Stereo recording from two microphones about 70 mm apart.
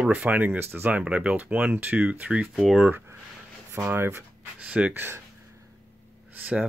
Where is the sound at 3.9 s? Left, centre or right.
Right.